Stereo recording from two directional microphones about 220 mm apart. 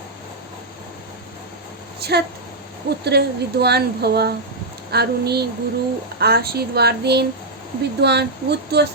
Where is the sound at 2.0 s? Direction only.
45° right (ahead or behind).